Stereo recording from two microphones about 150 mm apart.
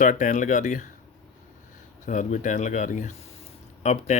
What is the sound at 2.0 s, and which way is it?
Speech, 55° left (ahead or behind).